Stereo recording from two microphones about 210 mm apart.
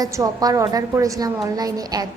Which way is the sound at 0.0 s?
15° right (ahead or behind).